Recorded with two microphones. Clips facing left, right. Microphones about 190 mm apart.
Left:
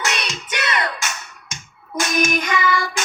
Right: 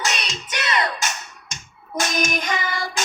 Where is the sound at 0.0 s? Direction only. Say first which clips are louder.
Left 2 dB; 55° left (ahead or behind).